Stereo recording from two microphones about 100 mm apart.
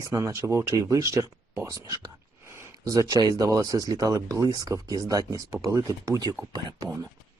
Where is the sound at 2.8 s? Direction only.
35° right (ahead or behind).